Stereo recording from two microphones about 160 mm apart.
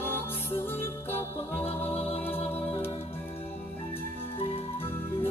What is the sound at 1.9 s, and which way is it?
Music, 40° left (ahead or behind).